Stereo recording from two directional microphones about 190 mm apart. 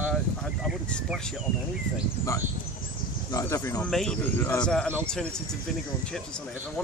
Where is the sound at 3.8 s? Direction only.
Centre (ahead or behind).